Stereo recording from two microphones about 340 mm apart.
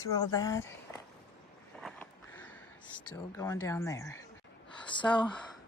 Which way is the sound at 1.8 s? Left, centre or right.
Centre.